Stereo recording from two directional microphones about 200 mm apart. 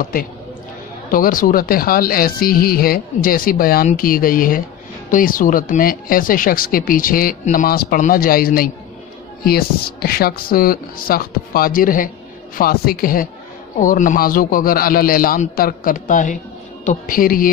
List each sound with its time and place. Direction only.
1.1 s a woman's voice: 45° left (ahead or behind)